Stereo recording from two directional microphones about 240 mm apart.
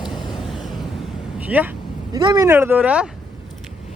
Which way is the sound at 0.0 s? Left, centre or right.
Centre.